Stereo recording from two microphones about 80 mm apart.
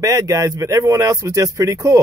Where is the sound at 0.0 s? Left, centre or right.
Right.